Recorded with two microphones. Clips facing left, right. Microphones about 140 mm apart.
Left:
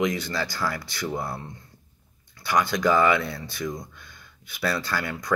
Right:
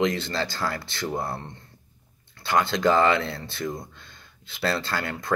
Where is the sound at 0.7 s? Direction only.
55° right (ahead or behind).